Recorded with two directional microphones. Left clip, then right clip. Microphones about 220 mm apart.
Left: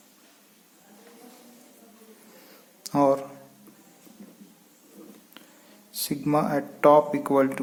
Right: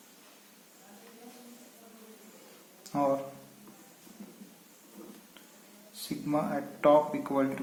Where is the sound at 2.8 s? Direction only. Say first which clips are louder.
Left 8 dB; 50° left (ahead or behind).